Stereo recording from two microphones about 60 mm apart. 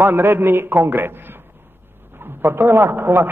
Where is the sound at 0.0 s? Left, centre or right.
Right.